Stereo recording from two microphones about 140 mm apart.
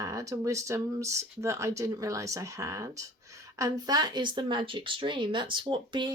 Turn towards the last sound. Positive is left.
turn(degrees=-35)  # may be behind; listen again after turning